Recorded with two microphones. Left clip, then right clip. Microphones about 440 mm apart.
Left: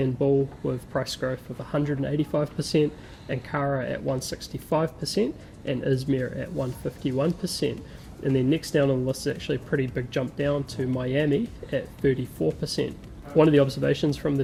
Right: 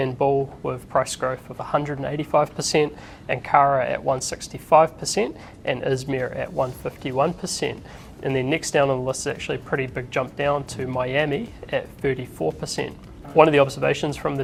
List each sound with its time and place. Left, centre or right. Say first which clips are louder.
0.2 s speech: right 3 dB; right